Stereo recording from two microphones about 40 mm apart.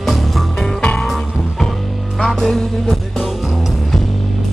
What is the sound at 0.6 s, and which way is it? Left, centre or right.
Music, centre.